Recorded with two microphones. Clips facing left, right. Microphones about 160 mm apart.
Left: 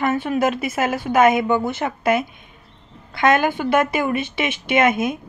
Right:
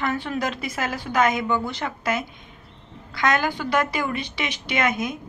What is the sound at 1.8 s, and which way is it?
Speech, 25° left (ahead or behind).